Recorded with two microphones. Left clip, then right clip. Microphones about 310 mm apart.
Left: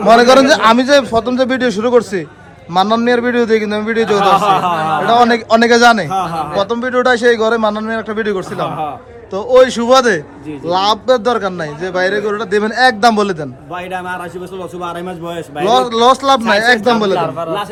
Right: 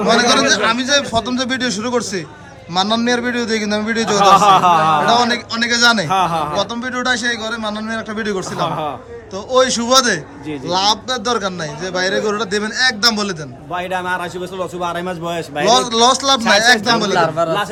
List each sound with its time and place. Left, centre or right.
0.0 s a man's voice: centre
15.5 s a man's voice: centre
17.2 s a man's voice: right